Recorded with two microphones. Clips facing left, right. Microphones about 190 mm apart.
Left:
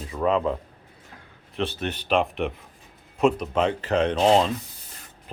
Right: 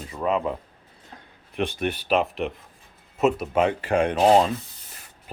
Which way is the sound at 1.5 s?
15° right (ahead or behind).